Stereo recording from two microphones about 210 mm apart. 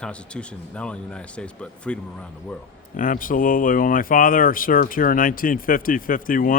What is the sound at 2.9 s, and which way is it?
Speech, 40° left (ahead or behind).